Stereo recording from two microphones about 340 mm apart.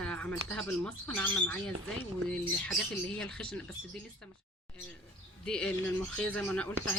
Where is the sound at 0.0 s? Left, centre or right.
Centre.